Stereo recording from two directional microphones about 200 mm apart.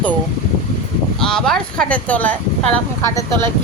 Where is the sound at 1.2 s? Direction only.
5° left (ahead or behind).